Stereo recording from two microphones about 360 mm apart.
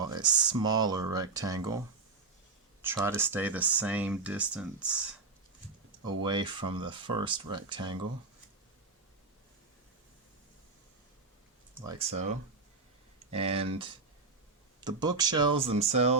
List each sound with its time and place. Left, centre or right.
0.1 s speech: centre
2.8 s speech: centre
6.1 s speech: centre
11.7 s speech: centre
13.3 s speech: centre
14.8 s speech: centre